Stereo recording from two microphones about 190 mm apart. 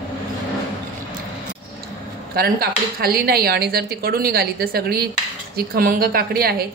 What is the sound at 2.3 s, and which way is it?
Speech, 55° right (ahead or behind).